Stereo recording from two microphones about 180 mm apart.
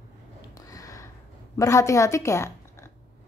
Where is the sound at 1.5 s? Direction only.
15° left (ahead or behind).